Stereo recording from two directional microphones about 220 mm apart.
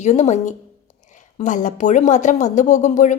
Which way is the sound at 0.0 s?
30° left (ahead or behind).